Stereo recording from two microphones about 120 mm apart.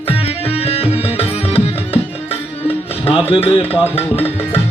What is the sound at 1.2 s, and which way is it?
Music, 55° left (ahead or behind).